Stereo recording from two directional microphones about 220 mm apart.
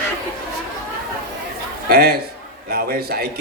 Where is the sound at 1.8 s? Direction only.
45° right (ahead or behind).